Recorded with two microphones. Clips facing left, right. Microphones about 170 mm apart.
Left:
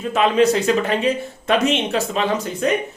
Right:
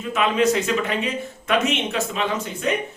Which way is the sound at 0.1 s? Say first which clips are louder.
Left 4 dB; 35° left (ahead or behind).